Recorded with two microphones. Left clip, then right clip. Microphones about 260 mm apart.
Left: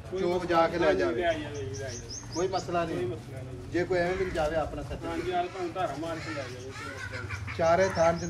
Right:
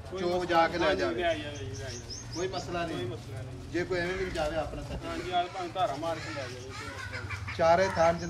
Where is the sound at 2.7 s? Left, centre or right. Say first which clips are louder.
Left 4 dB; centre.